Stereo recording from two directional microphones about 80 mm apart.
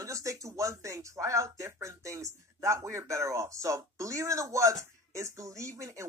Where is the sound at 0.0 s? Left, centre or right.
Right.